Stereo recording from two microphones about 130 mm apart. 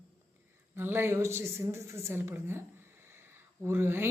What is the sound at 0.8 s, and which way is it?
Speech, 15° right (ahead or behind).